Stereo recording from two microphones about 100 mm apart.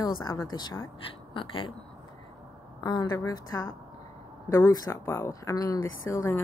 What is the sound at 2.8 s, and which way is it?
A woman's voice, 40° left (ahead or behind).